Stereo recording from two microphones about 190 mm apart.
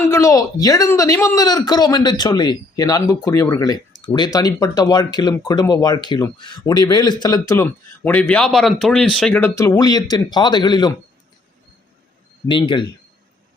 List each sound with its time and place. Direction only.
0.0 s speech: 15° left (ahead or behind)
9.6 s speech: 15° left (ahead or behind)
12.5 s speech: 25° left (ahead or behind)